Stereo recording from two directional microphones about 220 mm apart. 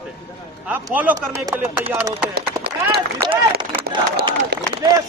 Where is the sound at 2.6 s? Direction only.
45° right (ahead or behind).